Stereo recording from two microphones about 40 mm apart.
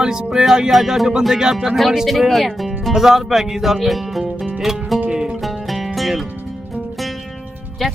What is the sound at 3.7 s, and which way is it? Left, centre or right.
Music, centre.